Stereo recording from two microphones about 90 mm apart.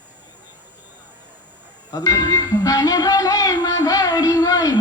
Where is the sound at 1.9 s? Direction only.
40° left (ahead or behind).